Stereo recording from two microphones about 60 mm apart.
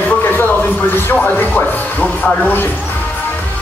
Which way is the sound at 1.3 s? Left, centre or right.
Left.